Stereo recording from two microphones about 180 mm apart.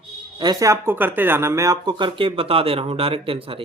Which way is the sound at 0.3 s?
20° right (ahead or behind).